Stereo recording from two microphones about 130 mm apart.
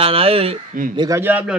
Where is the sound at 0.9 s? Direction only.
25° right (ahead or behind).